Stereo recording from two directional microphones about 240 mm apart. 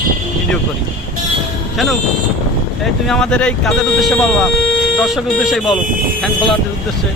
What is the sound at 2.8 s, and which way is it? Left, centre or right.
Speech, centre.